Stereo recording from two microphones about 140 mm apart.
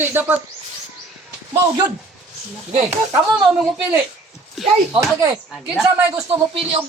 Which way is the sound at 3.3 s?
5° right (ahead or behind).